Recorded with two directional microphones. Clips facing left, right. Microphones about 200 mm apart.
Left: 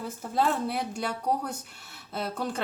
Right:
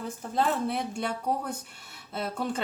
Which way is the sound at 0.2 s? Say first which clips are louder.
Left 1 dB; 5° left (ahead or behind).